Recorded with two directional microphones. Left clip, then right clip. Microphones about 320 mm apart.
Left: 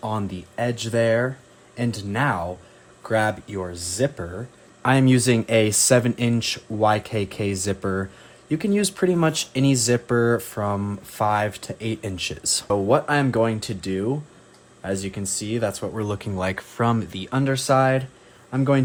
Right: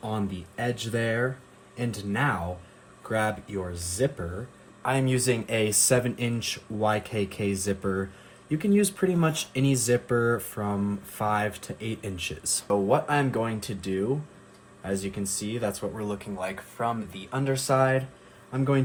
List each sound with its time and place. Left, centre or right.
0.0 s speech: left